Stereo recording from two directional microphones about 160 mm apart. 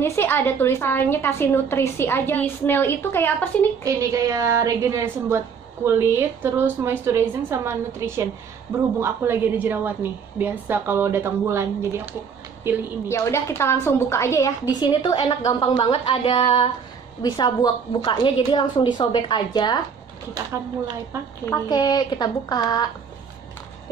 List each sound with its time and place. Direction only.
0.0 s a woman's voice: 15° left (ahead or behind)
3.8 s a woman's voice: 20° right (ahead or behind)
13.1 s a woman's voice: 20° left (ahead or behind)
20.3 s a woman's voice: 20° right (ahead or behind)
21.5 s a woman's voice: 25° left (ahead or behind)